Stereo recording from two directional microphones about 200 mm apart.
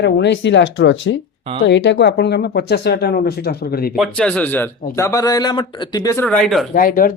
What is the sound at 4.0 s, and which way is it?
A man's voice, 5° left (ahead or behind).